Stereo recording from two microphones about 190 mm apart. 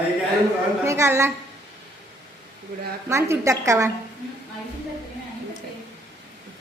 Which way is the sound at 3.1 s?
15° right (ahead or behind).